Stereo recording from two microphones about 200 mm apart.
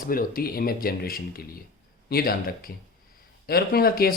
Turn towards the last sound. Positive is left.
turn(degrees=50)  # may be behind; listen again after turning